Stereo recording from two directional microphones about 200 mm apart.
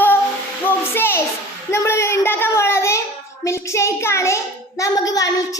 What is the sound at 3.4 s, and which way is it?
A child's voice, 15° left (ahead or behind).